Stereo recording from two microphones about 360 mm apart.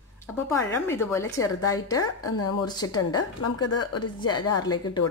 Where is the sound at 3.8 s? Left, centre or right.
Left.